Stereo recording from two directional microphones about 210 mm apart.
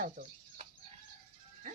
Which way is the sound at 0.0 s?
35° right (ahead or behind).